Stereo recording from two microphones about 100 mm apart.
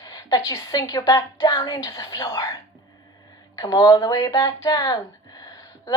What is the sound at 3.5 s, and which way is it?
Speech, 40° left (ahead or behind).